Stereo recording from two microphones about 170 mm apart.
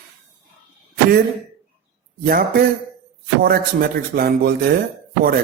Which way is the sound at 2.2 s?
65° right (ahead or behind).